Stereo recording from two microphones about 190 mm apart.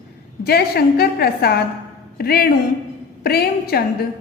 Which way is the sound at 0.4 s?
55° left (ahead or behind).